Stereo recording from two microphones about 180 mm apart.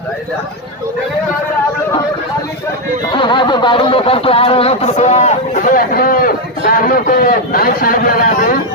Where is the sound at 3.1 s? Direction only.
25° left (ahead or behind); by 8.5 s 50° left (ahead or behind).